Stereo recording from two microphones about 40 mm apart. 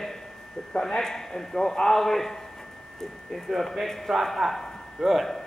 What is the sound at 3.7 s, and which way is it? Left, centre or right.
A man's voice, centre.